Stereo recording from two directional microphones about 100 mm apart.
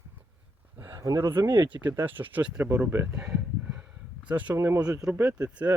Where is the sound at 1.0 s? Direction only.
30° right (ahead or behind).